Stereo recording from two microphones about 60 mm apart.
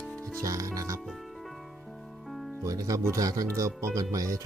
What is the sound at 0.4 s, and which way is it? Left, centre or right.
Speech, right.